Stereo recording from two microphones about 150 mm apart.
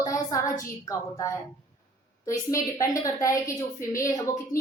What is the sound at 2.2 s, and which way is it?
A woman's voice, 20° left (ahead or behind).